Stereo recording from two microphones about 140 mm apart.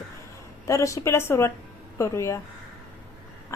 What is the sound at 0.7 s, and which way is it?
A woman's voice, 20° left (ahead or behind).